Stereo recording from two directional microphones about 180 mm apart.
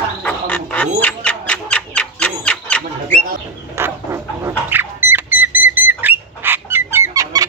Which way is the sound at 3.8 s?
15° right (ahead or behind).